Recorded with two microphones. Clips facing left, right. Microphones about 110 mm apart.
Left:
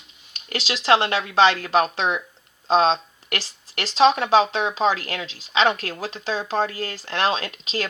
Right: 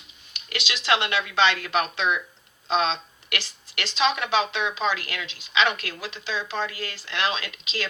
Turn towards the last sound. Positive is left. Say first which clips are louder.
# left 4 dB
turn(degrees=35)  # may be behind; listen again after turning